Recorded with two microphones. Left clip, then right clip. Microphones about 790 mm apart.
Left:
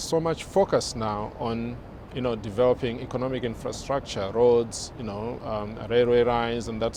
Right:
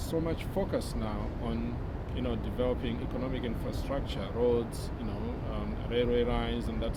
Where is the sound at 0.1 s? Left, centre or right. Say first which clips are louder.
Left 9 dB; left.